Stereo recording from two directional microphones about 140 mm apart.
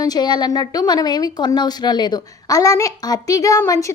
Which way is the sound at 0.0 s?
30° left (ahead or behind).